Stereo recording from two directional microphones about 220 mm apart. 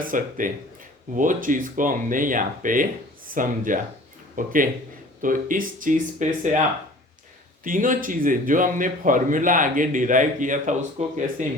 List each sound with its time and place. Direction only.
0.0 s speech: 40° right (ahead or behind)
7.6 s speech: 35° right (ahead or behind)